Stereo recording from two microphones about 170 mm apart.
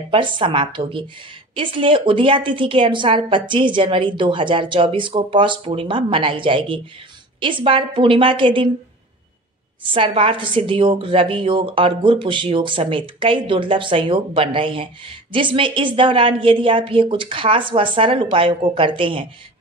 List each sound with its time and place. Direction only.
0.1 s a woman's voice: 30° right (ahead or behind)
9.8 s a woman's voice: 30° right (ahead or behind)